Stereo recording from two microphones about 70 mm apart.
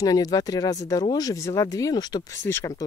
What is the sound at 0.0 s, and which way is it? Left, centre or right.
Speech, left.